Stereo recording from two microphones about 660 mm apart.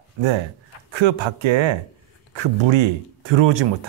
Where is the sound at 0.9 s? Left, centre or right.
Right.